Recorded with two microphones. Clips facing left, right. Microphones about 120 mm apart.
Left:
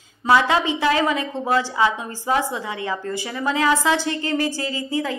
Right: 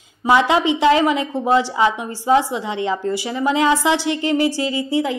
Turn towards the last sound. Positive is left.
turn(degrees=-20)  # may be behind; listen again after turning